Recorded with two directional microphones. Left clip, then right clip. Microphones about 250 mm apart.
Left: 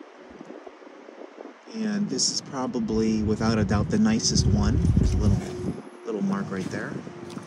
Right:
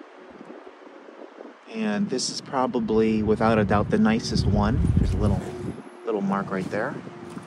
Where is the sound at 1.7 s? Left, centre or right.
Centre.